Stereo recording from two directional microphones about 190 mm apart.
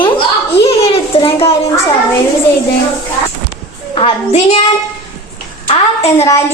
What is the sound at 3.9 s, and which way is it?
Speech, 30° left (ahead or behind).